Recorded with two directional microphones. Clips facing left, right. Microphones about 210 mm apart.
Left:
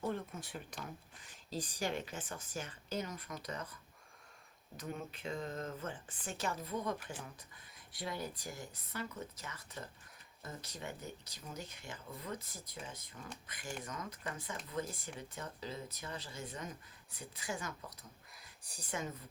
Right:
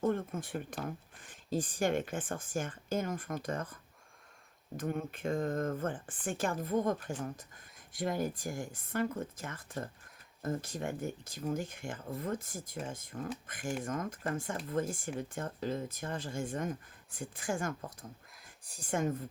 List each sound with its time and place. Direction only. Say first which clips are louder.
0.0 s speech: right 7 dB; 50° right (ahead or behind)
4.8 s speech: right 8 dB; 50° right (ahead or behind)